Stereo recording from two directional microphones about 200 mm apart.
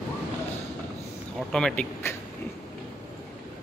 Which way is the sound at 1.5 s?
5° left (ahead or behind).